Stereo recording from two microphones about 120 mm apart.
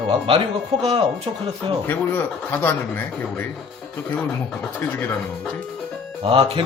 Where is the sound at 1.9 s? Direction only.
15° left (ahead or behind).